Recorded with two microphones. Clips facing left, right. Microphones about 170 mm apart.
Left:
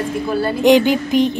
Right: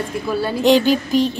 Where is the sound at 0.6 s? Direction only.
15° left (ahead or behind).